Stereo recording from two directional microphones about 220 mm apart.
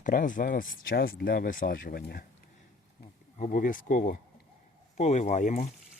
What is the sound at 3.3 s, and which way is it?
Speech, 35° left (ahead or behind).